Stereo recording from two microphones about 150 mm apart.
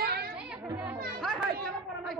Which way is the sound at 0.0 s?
90° right.